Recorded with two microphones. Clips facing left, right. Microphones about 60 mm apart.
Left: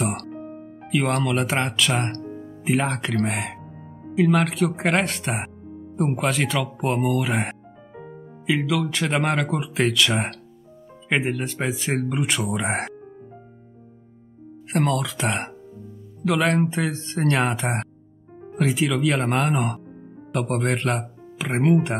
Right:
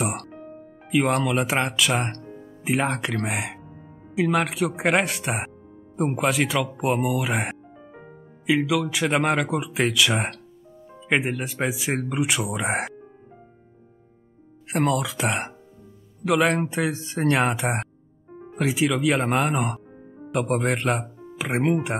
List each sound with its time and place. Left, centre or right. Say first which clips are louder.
0.0 s music: left 1 dB; centre
0.4 s music: left 4 dB; left
0.8 s speech: right 1 dB; centre
14.7 s speech: even; centre